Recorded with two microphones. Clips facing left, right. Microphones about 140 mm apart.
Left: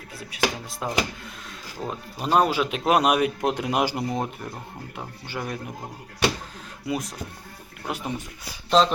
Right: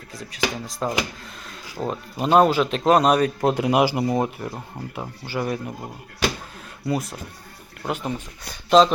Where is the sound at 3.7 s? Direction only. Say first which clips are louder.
Right 6 dB; 5° right (ahead or behind).